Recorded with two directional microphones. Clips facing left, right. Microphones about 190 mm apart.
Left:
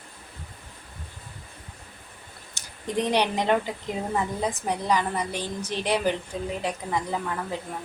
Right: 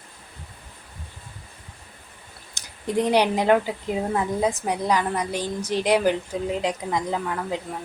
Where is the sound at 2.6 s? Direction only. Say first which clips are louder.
Right 4 dB; 10° right (ahead or behind).